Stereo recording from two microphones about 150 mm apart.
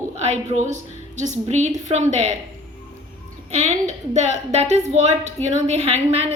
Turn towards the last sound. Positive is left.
turn(degrees=-45)  # may be behind; listen again after turning